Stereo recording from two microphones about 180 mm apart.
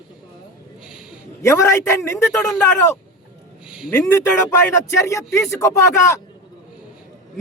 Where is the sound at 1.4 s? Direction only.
15° left (ahead or behind).